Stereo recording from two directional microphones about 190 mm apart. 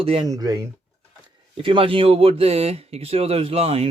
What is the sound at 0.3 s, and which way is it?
Speech, 20° right (ahead or behind).